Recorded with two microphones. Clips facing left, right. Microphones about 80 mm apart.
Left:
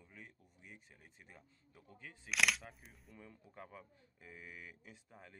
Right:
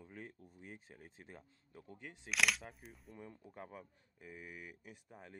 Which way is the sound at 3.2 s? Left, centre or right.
Centre.